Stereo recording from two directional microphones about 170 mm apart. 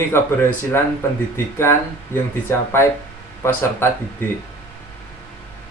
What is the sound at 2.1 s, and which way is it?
Speech, 15° left (ahead or behind).